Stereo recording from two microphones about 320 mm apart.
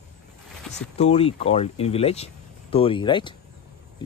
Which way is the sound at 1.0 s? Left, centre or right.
Centre.